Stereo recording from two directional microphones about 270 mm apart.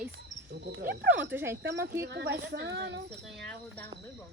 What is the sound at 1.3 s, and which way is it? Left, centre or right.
Speech, centre.